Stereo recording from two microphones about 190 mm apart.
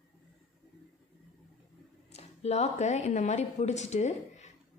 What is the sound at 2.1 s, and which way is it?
Speech, 35° left (ahead or behind).